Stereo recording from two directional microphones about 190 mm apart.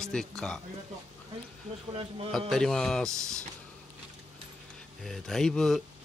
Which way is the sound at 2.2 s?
Centre (ahead or behind).